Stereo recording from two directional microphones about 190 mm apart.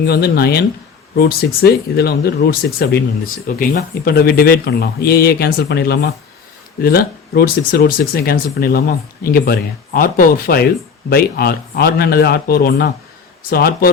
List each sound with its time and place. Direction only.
0.0 s speech: 55° left (ahead or behind)